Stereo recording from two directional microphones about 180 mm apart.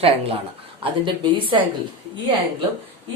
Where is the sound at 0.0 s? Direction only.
30° right (ahead or behind).